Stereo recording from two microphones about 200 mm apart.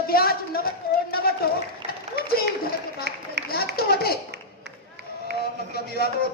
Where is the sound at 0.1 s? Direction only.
50° left (ahead or behind).